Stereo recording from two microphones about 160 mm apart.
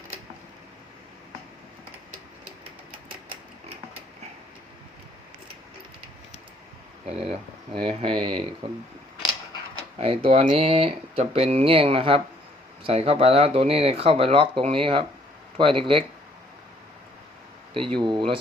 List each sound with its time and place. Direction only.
7.0 s speech: 35° right (ahead or behind)
10.0 s speech: 35° right (ahead or behind)
18.0 s speech: 30° right (ahead or behind)